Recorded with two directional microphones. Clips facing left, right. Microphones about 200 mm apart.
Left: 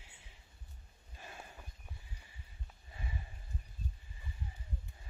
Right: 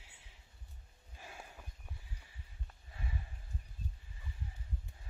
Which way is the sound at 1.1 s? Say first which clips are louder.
Left 1 dB; 5° right (ahead or behind).